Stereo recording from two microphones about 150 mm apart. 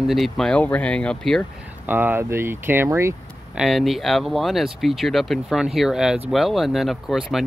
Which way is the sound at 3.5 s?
Centre (ahead or behind).